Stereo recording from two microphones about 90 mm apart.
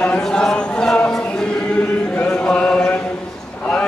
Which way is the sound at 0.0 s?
10° left (ahead or behind).